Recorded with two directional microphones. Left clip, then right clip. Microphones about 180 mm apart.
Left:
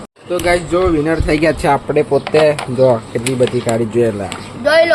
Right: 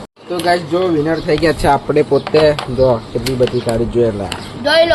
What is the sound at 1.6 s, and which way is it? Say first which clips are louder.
Speech: right 1 dB; centre (ahead or behind).